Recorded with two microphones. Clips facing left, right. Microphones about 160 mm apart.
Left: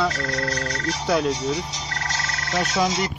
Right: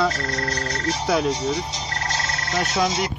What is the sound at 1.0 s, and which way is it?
Speech, centre (ahead or behind).